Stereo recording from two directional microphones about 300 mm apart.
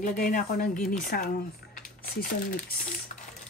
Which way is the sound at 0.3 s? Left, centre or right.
Left.